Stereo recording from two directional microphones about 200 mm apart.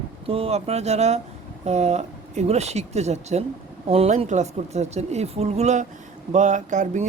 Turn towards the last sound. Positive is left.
turn(degrees=-35)  # may be behind; listen again after turning